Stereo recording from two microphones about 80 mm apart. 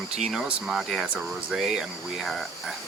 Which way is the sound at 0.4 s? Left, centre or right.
Centre.